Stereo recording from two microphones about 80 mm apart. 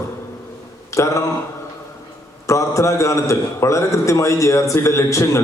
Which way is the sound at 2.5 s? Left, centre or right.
Left.